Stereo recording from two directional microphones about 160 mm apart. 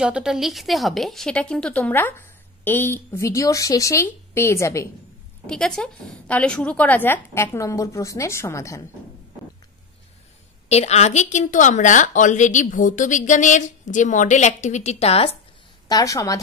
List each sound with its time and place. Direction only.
0.0 s speech: 5° right (ahead or behind); by 4.8 s 15° left (ahead or behind)
5.5 s speech: 5° left (ahead or behind)
10.7 s a woman's voice: 40° left (ahead or behind)
15.9 s a woman's voice: 20° left (ahead or behind)